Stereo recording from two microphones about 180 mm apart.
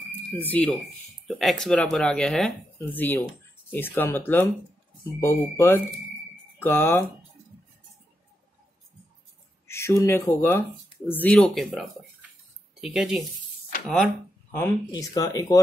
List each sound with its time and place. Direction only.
0.5 s speech: 5° left (ahead or behind)
9.7 s speech: 15° left (ahead or behind)
14.5 s speech: 15° left (ahead or behind)